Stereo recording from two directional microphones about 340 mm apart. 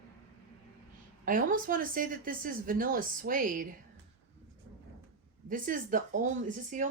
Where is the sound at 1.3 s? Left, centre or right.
Right.